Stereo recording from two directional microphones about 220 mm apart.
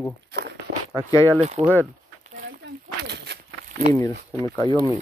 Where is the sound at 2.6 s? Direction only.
50° right (ahead or behind).